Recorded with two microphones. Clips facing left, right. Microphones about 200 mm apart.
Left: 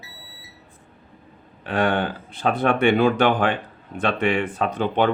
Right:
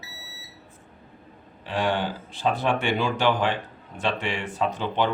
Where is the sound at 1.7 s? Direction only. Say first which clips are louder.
Left 4 dB; 60° left (ahead or behind).